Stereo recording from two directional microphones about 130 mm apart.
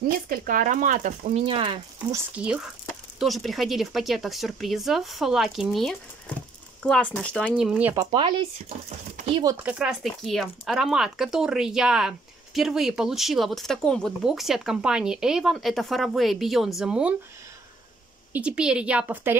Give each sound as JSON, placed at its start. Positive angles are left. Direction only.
{"t": 0.3, "sound": "speech", "side_deg": -90}
{"t": 1.4, "sound": "speech", "side_deg": -45}
{"t": 2.3, "sound": "a woman's voice", "side_deg": -5}
{"t": 7.4, "sound": "a woman's voice", "side_deg": -5}
{"t": 8.1, "sound": "speech", "side_deg": -40}
{"t": 8.8, "sound": "speech", "side_deg": -70}
{"t": 9.6, "sound": "speech", "side_deg": -10}
{"t": 18.3, "sound": "a woman's voice", "side_deg": -10}